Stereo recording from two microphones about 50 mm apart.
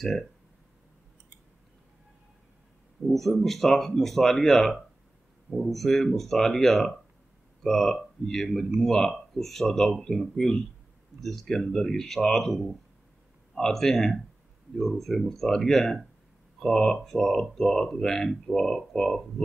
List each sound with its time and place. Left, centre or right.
0.0 s speech: centre
3.1 s speech: centre